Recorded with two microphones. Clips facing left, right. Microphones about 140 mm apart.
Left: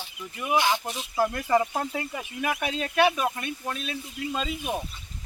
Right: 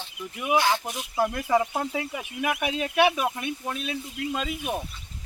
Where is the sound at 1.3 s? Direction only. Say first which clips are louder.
Even; 5° right (ahead or behind).